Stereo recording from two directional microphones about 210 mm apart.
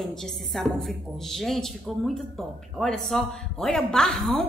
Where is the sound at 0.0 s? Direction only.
Centre (ahead or behind).